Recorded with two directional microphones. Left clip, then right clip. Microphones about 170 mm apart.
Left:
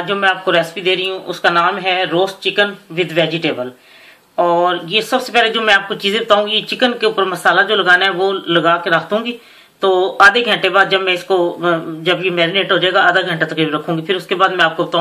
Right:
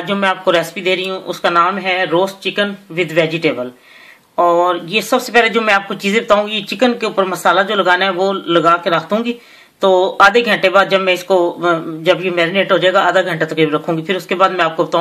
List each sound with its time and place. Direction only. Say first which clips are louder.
0.0 s speech: even; 65° right (ahead or behind)